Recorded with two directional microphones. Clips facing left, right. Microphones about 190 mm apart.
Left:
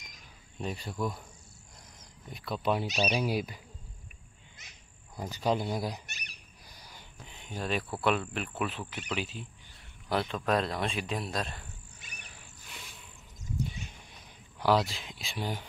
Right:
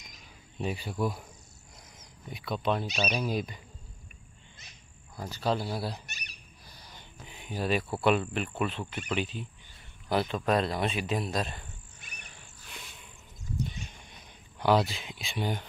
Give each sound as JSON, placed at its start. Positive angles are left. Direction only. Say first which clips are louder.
{"t": 0.6, "sound": "speech", "louder": "right 3 dB", "side_deg": -5}
{"t": 2.2, "sound": "speech", "louder": "right 1 dB", "side_deg": 0}
{"t": 5.1, "sound": "speech", "louder": "even", "side_deg": 15}
{"t": 6.7, "sound": "a sound", "louder": "right 1 dB", "side_deg": 10}
{"t": 7.2, "sound": "cricket", "louder": "right 4 dB", "side_deg": -5}
{"t": 8.0, "sound": "speech", "louder": "right 3 dB", "side_deg": 0}
{"t": 13.7, "sound": "a sound", "louder": "right 1 dB", "side_deg": 5}